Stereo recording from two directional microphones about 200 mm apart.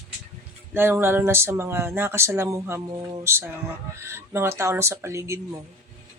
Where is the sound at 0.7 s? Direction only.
10° right (ahead or behind).